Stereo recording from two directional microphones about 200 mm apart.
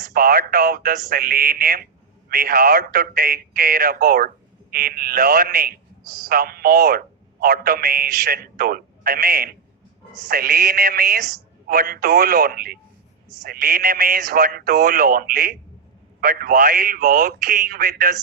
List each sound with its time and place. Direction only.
0.0 s a man's voice: 50° right (ahead or behind)